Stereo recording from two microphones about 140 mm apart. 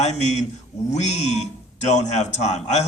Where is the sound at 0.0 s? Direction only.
55° left (ahead or behind).